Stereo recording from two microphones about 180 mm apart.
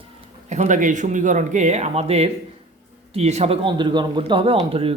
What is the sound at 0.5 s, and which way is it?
A man's voice, 40° right (ahead or behind).